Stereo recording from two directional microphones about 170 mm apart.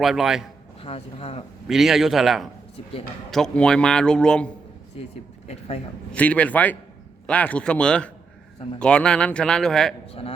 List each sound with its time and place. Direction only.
0.0 s a man's voice: centre (ahead or behind)
0.8 s speech: 35° left (ahead or behind)
1.6 s a man's voice: centre (ahead or behind)
5.5 s speech: 40° left (ahead or behind)
6.1 s a man's voice: 10° left (ahead or behind)